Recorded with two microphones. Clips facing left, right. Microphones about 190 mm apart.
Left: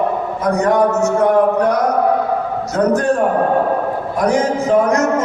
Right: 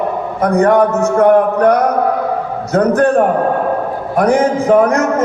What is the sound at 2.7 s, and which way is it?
Speech, 60° right (ahead or behind).